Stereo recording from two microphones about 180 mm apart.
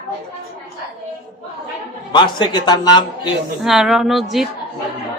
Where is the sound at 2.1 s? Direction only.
25° left (ahead or behind).